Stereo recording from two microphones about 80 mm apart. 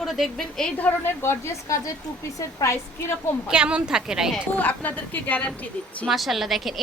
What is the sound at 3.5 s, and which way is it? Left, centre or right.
Speech, centre.